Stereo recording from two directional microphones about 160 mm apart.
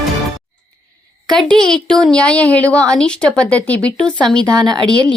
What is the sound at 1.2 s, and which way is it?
A woman's voice, 5° left (ahead or behind).